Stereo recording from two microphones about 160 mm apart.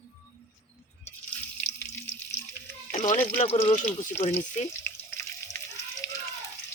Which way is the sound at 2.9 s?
50° left (ahead or behind).